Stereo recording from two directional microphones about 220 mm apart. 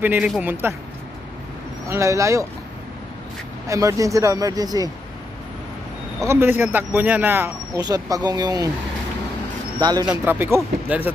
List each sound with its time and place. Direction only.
0.0 s speech: 5° right (ahead or behind)
1.9 s speech: 15° right (ahead or behind)
3.6 s speech: 15° right (ahead or behind)
6.2 s speech: 10° right (ahead or behind)
9.8 s speech: 20° right (ahead or behind)